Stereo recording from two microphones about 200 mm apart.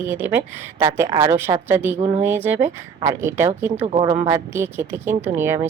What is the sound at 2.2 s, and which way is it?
Speech, 10° right (ahead or behind).